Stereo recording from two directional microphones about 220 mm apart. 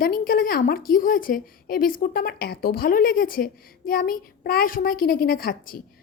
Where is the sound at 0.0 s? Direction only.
40° left (ahead or behind).